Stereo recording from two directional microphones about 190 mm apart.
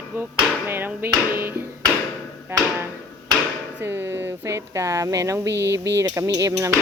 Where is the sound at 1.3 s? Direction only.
10° right (ahead or behind).